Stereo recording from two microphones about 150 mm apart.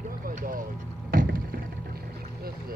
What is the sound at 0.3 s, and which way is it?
Vehicle, 55° right (ahead or behind).